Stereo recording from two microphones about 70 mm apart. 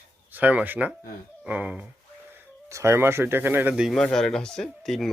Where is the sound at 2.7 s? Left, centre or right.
Right.